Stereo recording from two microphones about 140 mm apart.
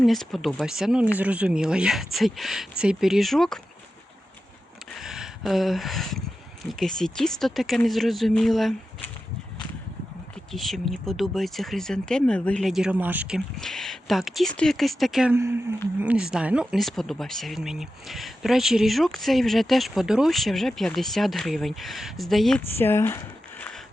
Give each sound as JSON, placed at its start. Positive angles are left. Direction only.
{"t": 0.0, "sound": "speech", "side_deg": 0}
{"t": 4.9, "sound": "speech", "side_deg": -5}
{"t": 10.5, "sound": "speech", "side_deg": 0}
{"t": 15.3, "sound": "speech", "side_deg": -15}
{"t": 22.8, "sound": "a sound", "side_deg": 15}